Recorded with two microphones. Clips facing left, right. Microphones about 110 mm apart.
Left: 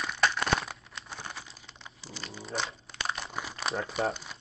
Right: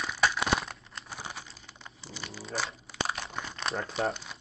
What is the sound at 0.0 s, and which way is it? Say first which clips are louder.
Crumpling: even; centre (ahead or behind).